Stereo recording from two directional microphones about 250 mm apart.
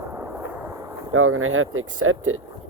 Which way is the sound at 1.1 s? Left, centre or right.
Right.